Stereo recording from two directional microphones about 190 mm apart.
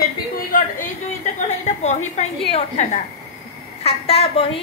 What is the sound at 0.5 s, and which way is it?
Speech, 45° left (ahead or behind).